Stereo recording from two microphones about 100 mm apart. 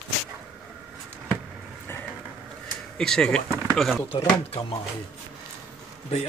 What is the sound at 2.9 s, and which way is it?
Speech, 5° left (ahead or behind).